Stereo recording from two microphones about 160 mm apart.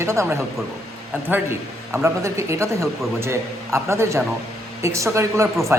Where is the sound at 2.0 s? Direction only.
20° right (ahead or behind).